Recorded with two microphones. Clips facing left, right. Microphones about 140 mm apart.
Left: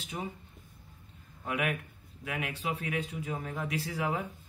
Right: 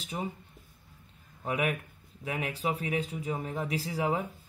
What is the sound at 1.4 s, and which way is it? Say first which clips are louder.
A man's voice: right 2 dB; 35° right (ahead or behind).